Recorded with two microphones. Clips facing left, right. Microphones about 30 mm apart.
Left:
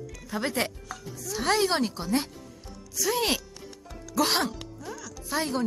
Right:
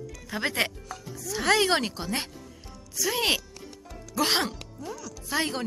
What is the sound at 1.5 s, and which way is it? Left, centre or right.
Speech, right.